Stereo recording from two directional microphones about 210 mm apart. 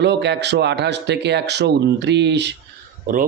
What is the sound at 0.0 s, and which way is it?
Speech, 55° right (ahead or behind).